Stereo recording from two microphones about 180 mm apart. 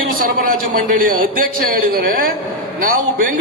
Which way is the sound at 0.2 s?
50° right (ahead or behind).